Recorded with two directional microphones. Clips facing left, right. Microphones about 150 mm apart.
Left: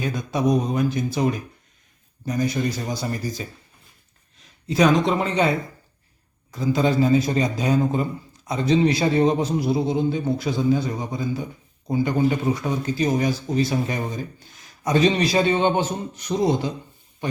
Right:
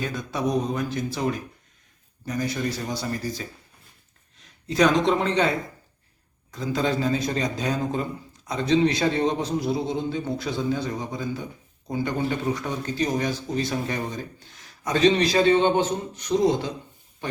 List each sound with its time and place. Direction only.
0.0 s a man's voice: 15° left (ahead or behind)
6.5 s speech: 10° left (ahead or behind)